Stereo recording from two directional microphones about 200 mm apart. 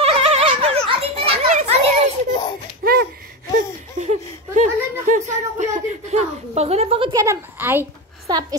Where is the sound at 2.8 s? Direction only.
50° right (ahead or behind).